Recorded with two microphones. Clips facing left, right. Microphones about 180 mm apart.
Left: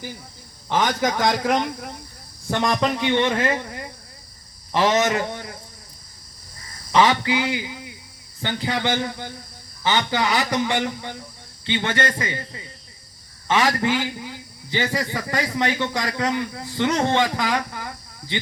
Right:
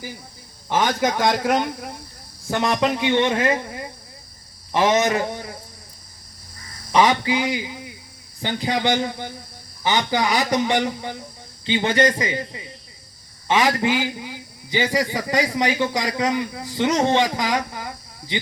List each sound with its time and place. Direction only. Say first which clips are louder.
0.7 s a man's voice: right 1 dB; 10° right (ahead or behind)
2.8 s a man's voice: right 3 dB; 15° right (ahead or behind)
6.9 s a man's voice: even; 15° right (ahead or behind)